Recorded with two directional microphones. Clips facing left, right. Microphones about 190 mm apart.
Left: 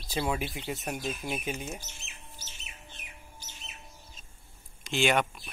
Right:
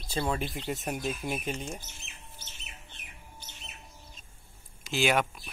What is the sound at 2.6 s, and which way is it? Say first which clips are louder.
Bird: left 1 dB; 60° right (ahead or behind).